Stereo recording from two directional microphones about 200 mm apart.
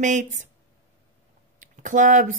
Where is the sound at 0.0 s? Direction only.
40° right (ahead or behind).